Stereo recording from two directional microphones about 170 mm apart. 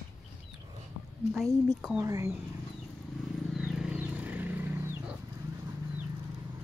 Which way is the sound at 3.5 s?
5° right (ahead or behind).